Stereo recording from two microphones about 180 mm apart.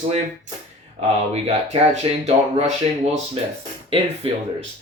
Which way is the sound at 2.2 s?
35° right (ahead or behind).